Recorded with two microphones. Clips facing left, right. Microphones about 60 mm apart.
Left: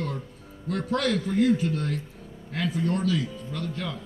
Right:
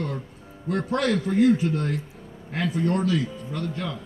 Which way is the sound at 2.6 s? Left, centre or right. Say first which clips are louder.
Right 2 dB; right.